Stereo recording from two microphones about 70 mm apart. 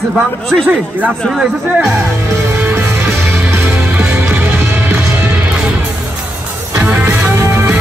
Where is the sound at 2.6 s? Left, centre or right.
Right.